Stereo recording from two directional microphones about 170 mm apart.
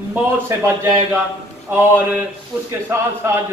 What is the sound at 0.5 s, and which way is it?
Speech, 15° right (ahead or behind).